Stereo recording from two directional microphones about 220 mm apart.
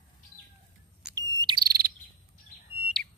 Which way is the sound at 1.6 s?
45° right (ahead or behind).